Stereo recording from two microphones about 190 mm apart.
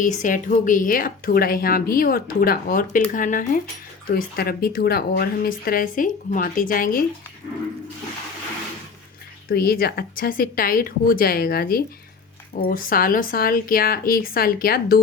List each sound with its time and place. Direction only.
0.0 s a woman's voice: 40° left (ahead or behind)
9.5 s a woman's voice: 50° left (ahead or behind)